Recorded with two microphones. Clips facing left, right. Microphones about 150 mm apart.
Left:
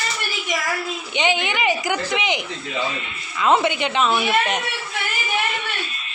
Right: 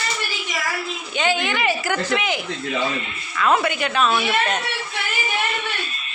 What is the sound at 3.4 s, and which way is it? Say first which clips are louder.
A woman's voice: left 1 dB; 20° left (ahead or behind).